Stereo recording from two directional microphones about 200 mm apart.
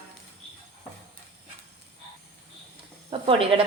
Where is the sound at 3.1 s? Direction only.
25° right (ahead or behind).